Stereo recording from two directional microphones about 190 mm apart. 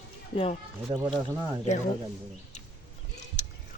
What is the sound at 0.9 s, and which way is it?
Speech, 15° right (ahead or behind).